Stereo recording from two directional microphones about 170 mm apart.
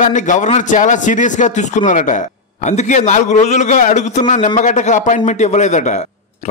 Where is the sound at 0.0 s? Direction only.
50° left (ahead or behind).